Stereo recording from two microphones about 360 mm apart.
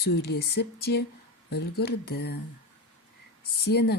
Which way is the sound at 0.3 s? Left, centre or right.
Left.